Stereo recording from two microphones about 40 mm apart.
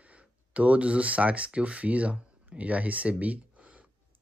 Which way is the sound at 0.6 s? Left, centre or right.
Right.